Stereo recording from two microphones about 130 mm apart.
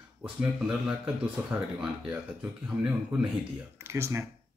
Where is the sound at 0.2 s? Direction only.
10° right (ahead or behind).